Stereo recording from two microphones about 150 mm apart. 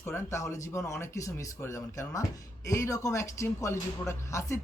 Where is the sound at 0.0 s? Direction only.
15° left (ahead or behind).